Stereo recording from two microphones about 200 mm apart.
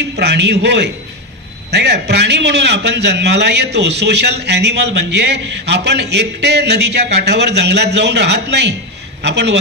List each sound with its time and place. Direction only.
0.1 s a man's voice: 55° right (ahead or behind)